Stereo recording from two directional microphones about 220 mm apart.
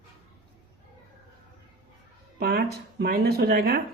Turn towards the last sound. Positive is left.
turn(degrees=-45)  # may be behind; listen again after turning